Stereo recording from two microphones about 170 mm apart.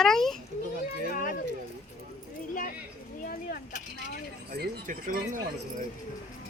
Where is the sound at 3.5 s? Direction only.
60° left (ahead or behind).